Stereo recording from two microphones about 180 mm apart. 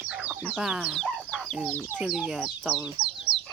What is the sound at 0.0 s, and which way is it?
Chicken, 5° right (ahead or behind).